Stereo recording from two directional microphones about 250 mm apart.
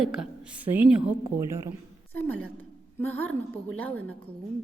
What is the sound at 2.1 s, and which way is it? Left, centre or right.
A woman's voice, centre.